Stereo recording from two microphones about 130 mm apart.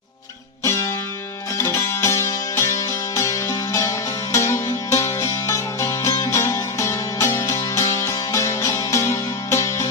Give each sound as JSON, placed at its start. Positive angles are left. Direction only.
{"t": 1.5, "sound": "music", "side_deg": 20}